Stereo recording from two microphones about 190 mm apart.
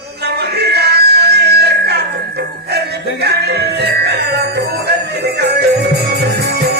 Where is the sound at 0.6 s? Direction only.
60° right (ahead or behind).